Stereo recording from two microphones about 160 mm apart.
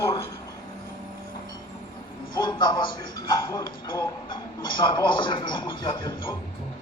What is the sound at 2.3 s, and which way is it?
A man's voice, 30° left (ahead or behind).